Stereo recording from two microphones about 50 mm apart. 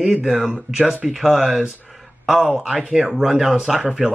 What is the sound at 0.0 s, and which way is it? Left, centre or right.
Speech, centre.